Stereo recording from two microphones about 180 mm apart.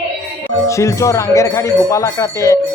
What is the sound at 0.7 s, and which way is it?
Speech, 15° left (ahead or behind).